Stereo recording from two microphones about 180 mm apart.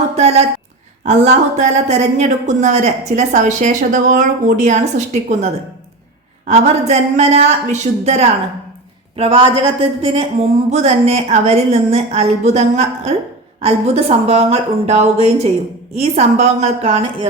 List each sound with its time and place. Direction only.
0.2 s a woman's voice: 35° right (ahead or behind)